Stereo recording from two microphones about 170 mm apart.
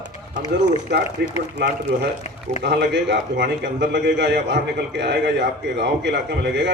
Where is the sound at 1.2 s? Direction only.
85° right.